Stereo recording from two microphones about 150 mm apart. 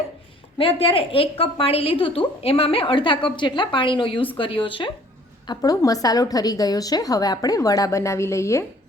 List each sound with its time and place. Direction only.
0.6 s a woman's voice: 40° left (ahead or behind)
5.5 s a woman's voice: 25° left (ahead or behind)